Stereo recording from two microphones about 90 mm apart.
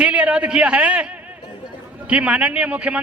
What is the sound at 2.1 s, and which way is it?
Speech, 15° right (ahead or behind).